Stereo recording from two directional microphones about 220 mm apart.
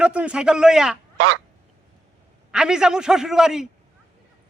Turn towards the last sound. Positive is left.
turn(degrees=0)  # may be behind; listen again after turning